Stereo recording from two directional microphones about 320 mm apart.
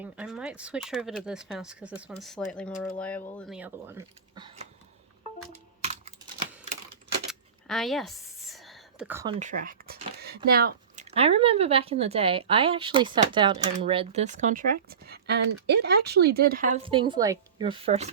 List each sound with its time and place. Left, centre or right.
0.0 s speech: centre
2.7 s speech: left
3.0 s speech: centre
5.8 s computer keyboard: centre
7.3 s a sound: centre
9.4 s speech: right